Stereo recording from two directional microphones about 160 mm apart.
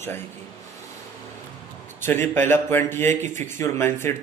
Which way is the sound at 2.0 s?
15° left (ahead or behind).